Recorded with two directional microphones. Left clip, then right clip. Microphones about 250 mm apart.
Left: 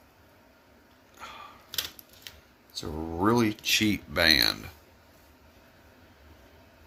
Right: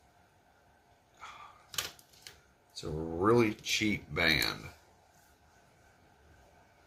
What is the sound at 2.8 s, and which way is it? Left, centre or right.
Speech, left.